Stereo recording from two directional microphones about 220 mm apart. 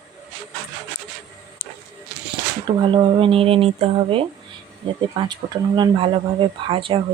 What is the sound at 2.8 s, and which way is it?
Speech, 25° right (ahead or behind).